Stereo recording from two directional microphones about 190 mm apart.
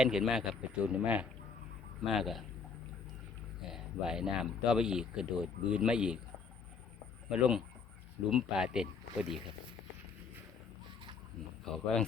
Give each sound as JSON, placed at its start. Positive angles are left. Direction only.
{"t": 0.0, "sound": "speech", "side_deg": -5}
{"t": 3.6, "sound": "speech", "side_deg": -5}
{"t": 7.3, "sound": "speech", "side_deg": -5}
{"t": 11.7, "sound": "speech", "side_deg": 5}